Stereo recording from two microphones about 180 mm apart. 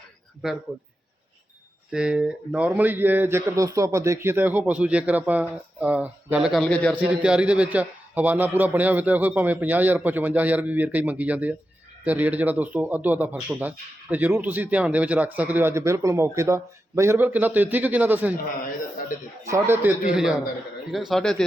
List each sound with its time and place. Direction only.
1.9 s speech: 5° right (ahead or behind)
6.9 s speech: 5° right (ahead or behind)
19.5 s speech: 15° right (ahead or behind); by 21.4 s 5° left (ahead or behind)